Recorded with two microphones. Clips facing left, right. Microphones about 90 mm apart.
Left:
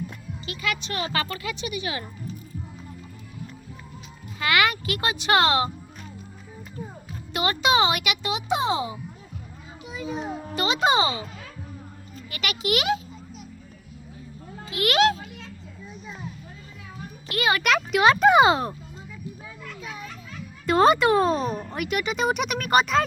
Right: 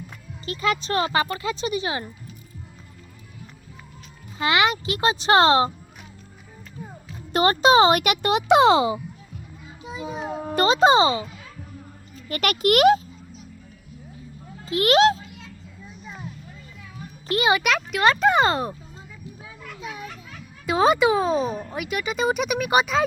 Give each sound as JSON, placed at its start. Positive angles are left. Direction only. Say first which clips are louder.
{"t": 0.4, "sound": "a child's voice", "louder": "right 6 dB", "side_deg": -35}
{"t": 1.1, "sound": "speech", "louder": "right 5 dB", "side_deg": -25}
{"t": 4.4, "sound": "speech", "louder": "right 2 dB", "side_deg": -25}
{"t": 7.3, "sound": "speech", "louder": "right 6 dB", "side_deg": -40}
{"t": 9.8, "sound": "a sound", "louder": "even", "side_deg": -25}
{"t": 10.5, "sound": "a child's voice", "louder": "right 6 dB", "side_deg": -40}
{"t": 12.3, "sound": "speech", "louder": "right 6 dB", "side_deg": -50}
{"t": 14.7, "sound": "speech", "louder": "right 4 dB", "side_deg": -35}
{"t": 17.2, "sound": "speech", "louder": "right 3 dB", "side_deg": -25}
{"t": 17.6, "sound": "speech", "louder": "left 1 dB", "side_deg": 0}
{"t": 19.6, "sound": "children playing", "louder": "right 3 dB", "side_deg": -15}
{"t": 20.7, "sound": "speech", "louder": "even", "side_deg": 0}